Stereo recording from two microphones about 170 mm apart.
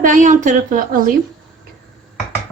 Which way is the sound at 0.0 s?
50° right (ahead or behind).